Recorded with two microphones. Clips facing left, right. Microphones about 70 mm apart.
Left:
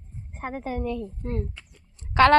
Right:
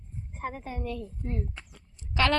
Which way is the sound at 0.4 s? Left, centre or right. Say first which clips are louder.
Left 2 dB; left.